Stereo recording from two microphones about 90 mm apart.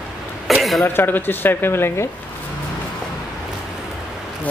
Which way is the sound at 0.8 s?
20° left (ahead or behind).